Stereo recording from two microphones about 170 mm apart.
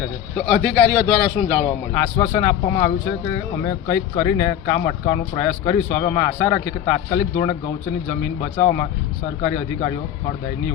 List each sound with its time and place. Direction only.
0.3 s a man's voice: centre (ahead or behind)
1.9 s speech: 15° left (ahead or behind)
8.6 s speech: 20° left (ahead or behind)